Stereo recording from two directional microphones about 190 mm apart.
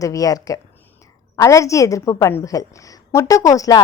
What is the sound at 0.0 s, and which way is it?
A woman's voice, 20° left (ahead or behind).